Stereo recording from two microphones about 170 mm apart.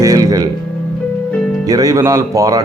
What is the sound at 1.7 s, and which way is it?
Speech, 20° right (ahead or behind).